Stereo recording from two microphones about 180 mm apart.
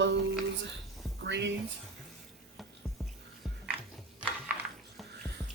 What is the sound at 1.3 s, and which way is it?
Speech, 75° right (ahead or behind).